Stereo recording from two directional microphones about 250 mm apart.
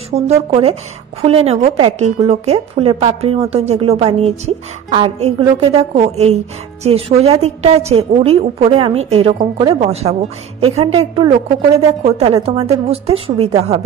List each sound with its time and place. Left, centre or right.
0.1 s a woman's voice: right